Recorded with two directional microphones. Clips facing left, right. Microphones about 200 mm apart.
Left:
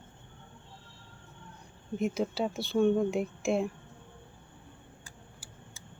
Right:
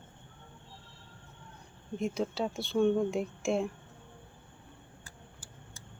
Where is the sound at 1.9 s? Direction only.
5° left (ahead or behind).